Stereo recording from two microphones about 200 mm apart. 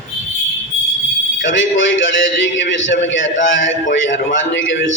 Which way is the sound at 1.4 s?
70° left (ahead or behind).